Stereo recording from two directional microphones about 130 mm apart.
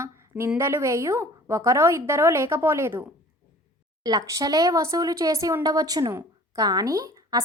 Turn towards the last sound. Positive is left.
turn(degrees=-25)  # may be behind; listen again after turning